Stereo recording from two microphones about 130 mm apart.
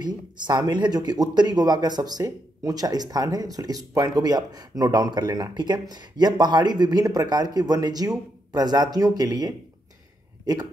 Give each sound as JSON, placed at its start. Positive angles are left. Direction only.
{"t": 0.0, "sound": "speech", "side_deg": -35}